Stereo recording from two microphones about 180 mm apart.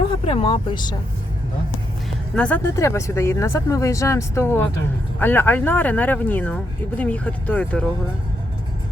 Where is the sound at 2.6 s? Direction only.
15° left (ahead or behind).